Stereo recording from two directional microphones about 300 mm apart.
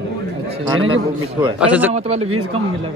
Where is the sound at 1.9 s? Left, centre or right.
Right.